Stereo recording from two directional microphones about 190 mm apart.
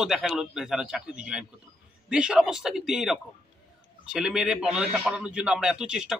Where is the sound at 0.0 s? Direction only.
Centre (ahead or behind).